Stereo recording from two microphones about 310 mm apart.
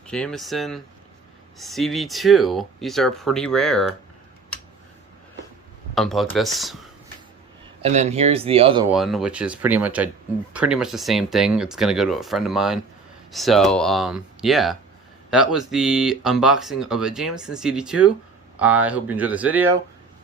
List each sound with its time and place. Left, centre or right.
0.1 s speech: centre
5.9 s speech: centre
7.8 s speech: right
8.9 s speech: centre